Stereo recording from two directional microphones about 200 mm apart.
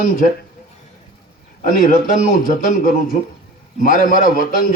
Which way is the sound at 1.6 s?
45° left (ahead or behind).